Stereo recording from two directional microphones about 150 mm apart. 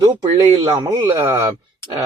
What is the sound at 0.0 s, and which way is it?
Speech, 25° right (ahead or behind).